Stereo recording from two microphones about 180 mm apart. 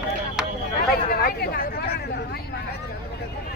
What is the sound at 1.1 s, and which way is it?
Speech, 55° left (ahead or behind).